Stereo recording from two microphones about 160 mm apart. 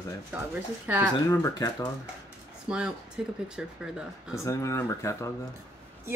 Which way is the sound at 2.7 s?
5° right (ahead or behind).